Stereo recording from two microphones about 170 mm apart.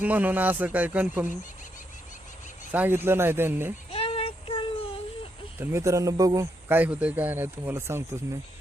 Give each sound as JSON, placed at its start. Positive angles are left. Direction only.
{"t": 0.0, "sound": "speech", "side_deg": -10}
{"t": 2.7, "sound": "speech", "side_deg": -10}
{"t": 3.9, "sound": "child singing", "side_deg": 35}
{"t": 5.5, "sound": "speech", "side_deg": -15}